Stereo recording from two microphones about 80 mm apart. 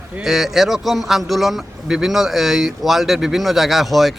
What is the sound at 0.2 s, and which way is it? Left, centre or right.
A man's voice, centre.